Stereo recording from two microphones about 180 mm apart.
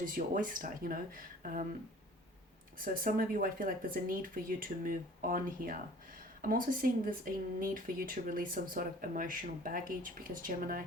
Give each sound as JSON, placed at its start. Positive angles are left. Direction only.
{"t": 0.0, "sound": "speech", "side_deg": -50}
{"t": 2.7, "sound": "speech", "side_deg": -50}